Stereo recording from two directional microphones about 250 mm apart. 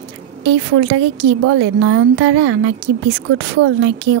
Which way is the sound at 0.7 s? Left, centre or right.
Right.